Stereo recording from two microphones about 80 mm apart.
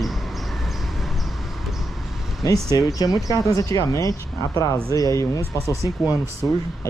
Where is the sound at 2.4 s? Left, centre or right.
Left.